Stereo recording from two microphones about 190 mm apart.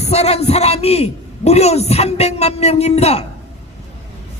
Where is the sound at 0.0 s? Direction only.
35° left (ahead or behind).